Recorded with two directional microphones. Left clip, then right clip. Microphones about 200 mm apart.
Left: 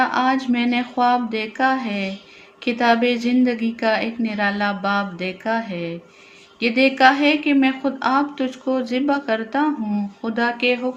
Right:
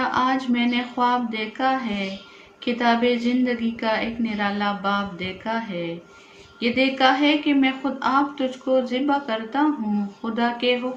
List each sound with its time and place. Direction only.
0.0 s a woman's voice: 45° left (ahead or behind)